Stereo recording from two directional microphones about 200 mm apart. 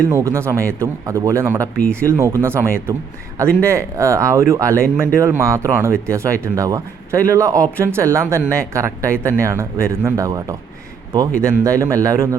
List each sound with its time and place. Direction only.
0.1 s speech: 15° right (ahead or behind)